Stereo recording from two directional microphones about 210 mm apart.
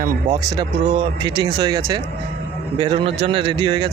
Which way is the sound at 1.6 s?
20° right (ahead or behind).